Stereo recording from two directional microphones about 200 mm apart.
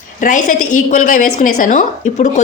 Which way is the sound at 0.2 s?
40° left (ahead or behind).